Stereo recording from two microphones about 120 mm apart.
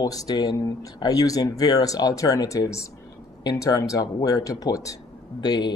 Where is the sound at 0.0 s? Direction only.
30° left (ahead or behind).